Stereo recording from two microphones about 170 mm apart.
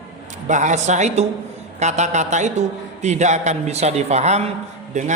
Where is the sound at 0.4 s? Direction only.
45° right (ahead or behind).